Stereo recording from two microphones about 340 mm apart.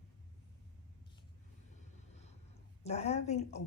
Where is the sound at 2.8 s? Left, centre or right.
Centre.